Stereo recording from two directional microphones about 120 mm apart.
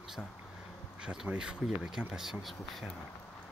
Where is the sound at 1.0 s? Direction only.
10° right (ahead or behind).